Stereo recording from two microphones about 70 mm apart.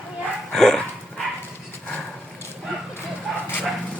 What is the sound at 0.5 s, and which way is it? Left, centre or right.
Dog, centre.